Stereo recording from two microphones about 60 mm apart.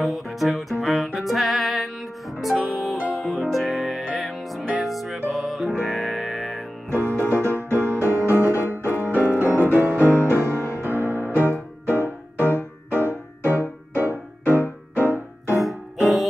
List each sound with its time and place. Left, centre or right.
0.0 s music: centre
6.9 s music: right
9.1 s piano: left
9.7 s music: right
15.6 s music: centre